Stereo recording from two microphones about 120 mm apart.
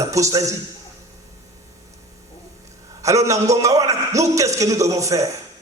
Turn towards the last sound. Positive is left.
turn(degrees=-25)  # may be behind; listen again after turning